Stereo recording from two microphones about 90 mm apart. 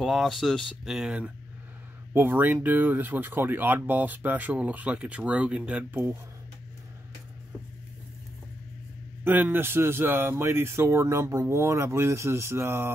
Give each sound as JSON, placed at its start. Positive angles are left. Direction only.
{"t": 0.0, "sound": "speech", "side_deg": 0}
{"t": 0.9, "sound": "speech", "side_deg": -10}
{"t": 2.1, "sound": "speech", "side_deg": -25}
{"t": 9.2, "sound": "speech", "side_deg": -20}